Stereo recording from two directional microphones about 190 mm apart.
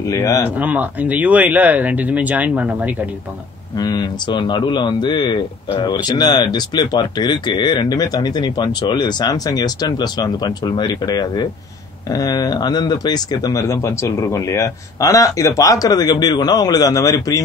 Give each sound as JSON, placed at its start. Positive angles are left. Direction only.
{"t": 0.0, "sound": "speech", "side_deg": 15}
{"t": 0.6, "sound": "speech", "side_deg": -10}
{"t": 3.7, "sound": "speech", "side_deg": 20}